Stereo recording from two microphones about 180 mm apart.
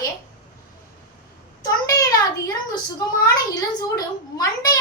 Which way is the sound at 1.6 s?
20° left (ahead or behind).